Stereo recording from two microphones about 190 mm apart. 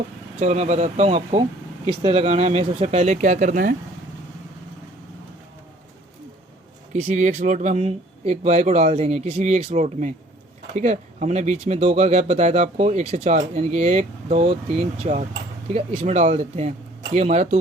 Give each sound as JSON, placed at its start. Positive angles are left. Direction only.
{"t": 0.3, "sound": "speech", "side_deg": -35}
{"t": 6.9, "sound": "speech", "side_deg": -40}